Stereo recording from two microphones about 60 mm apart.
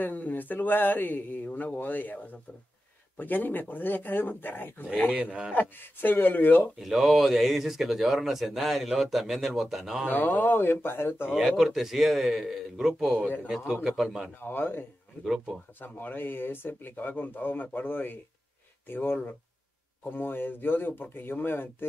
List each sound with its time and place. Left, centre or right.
0.0 s speech: left
3.2 s speech: left
5.1 s a man's voice: right
5.5 s speech: left
6.8 s speech: centre
10.0 s speech: left
11.3 s a man's voice: centre
14.4 s speech: left
15.2 s a man's voice: centre
15.8 s speech: left